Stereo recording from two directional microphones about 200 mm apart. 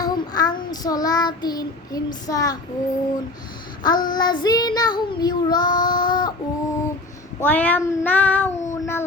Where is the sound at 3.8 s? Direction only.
20° left (ahead or behind).